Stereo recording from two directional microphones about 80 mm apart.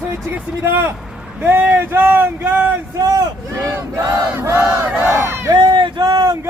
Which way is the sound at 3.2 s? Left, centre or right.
Right.